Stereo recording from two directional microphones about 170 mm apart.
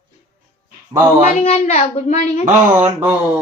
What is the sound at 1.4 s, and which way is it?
A woman's voice, 35° left (ahead or behind).